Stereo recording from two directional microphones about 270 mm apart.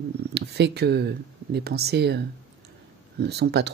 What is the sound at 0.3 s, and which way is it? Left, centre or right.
Speech, right.